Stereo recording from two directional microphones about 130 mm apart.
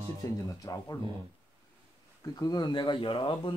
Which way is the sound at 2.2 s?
30° left (ahead or behind).